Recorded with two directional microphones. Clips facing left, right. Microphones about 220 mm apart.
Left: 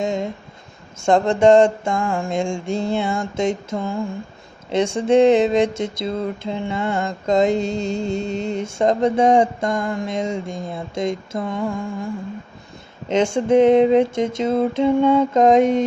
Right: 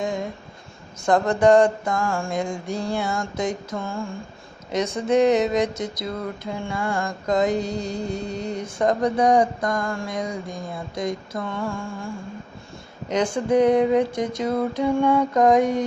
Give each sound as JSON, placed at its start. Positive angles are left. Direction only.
{"t": 0.0, "sound": "speech", "side_deg": 25}
{"t": 1.0, "sound": "mantra", "side_deg": 25}
{"t": 13.1, "sound": "mantra", "side_deg": 25}